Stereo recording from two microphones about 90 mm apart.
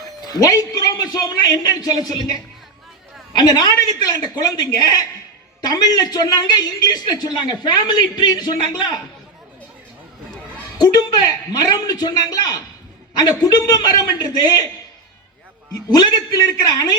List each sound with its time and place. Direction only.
0.2 s a man's voice: 45° left (ahead or behind)
3.3 s a man's voice: 50° left (ahead or behind)
10.8 s a man's voice: 50° left (ahead or behind)
16.0 s a man's voice: 45° left (ahead or behind)